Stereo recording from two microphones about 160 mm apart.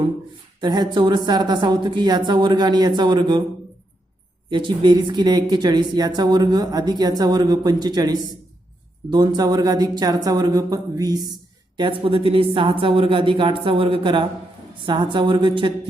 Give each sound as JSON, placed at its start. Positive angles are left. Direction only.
{"t": 0.6, "sound": "a woman's voice", "side_deg": -30}
{"t": 4.5, "sound": "a woman's voice", "side_deg": -30}
{"t": 11.8, "sound": "a woman's voice", "side_deg": -35}